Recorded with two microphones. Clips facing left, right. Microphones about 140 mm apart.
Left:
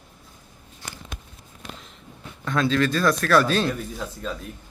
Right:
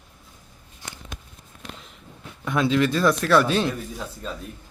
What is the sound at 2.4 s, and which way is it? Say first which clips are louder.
Speech: right 1 dB; 20° right (ahead or behind).